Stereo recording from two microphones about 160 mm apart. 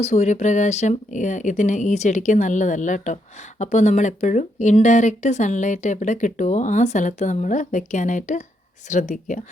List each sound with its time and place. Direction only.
0.0 s speech: 45° left (ahead or behind)